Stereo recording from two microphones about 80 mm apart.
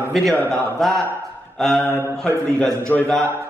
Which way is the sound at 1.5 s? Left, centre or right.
Centre.